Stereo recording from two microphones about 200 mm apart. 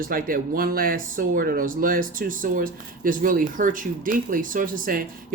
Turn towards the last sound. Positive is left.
turn(degrees=-45)  # may be behind; listen again after turning